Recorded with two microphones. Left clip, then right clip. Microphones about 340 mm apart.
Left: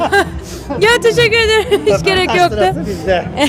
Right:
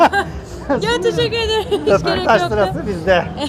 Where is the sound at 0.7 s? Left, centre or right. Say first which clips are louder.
Left 2 dB; right.